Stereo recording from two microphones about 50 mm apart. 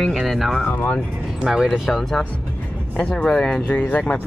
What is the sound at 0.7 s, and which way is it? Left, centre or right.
Speech, left.